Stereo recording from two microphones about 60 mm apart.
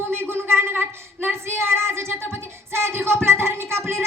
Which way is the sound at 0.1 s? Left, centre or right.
Right.